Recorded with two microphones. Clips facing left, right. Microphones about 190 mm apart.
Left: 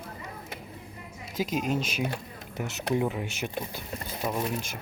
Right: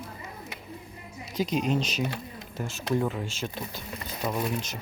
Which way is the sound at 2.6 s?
20° left (ahead or behind).